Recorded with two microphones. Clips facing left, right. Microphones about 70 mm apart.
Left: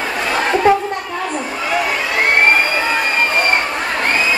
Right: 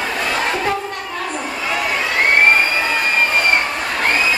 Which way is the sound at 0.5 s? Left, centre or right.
Left.